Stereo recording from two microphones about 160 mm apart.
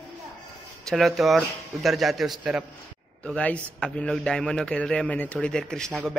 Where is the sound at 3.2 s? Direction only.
10° left (ahead or behind).